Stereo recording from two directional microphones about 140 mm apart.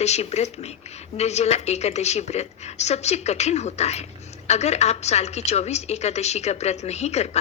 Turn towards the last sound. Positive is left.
turn(degrees=50)  # may be behind; listen again after turning